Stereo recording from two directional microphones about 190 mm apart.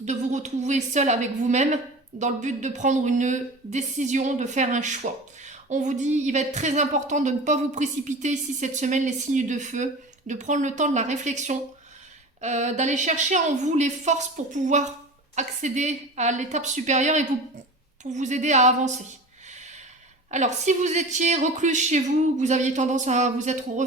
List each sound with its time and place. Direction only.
0.0 s a woman's voice: 40° right (ahead or behind)
20.3 s a woman's voice: 40° right (ahead or behind)